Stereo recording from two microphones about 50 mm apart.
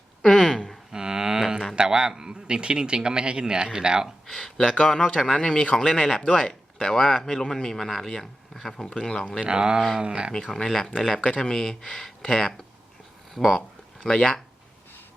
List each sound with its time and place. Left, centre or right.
0.2 s a sound: centre
0.9 s a sound: centre
1.7 s a man's voice: centre
4.3 s speech: centre
9.4 s a man's voice: centre
10.5 s speech: centre
14.0 s speech: centre